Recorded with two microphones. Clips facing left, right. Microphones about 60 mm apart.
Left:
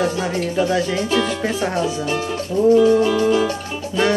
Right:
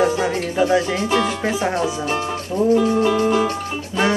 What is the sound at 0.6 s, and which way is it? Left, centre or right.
Speech, centre.